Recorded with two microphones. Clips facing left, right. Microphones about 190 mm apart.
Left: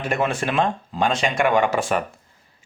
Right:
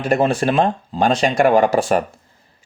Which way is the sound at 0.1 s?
35° right (ahead or behind).